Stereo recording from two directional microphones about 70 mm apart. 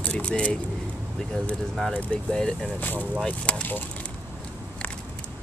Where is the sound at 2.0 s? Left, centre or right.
Centre.